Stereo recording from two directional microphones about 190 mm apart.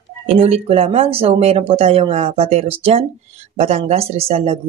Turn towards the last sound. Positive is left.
turn(degrees=-30)  # may be behind; listen again after turning